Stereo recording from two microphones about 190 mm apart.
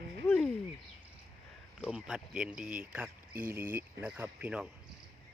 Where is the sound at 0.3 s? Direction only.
5° left (ahead or behind).